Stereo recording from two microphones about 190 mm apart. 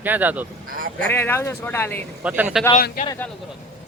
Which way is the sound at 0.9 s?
10° left (ahead or behind).